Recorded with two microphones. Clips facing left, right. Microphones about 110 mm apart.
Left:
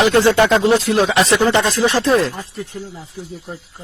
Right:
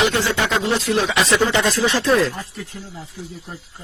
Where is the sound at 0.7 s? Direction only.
40° left (ahead or behind).